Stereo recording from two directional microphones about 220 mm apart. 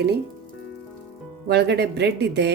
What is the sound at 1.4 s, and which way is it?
A woman's voice, 50° right (ahead or behind).